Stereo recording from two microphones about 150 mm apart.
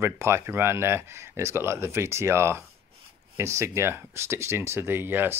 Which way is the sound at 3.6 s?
20° right (ahead or behind).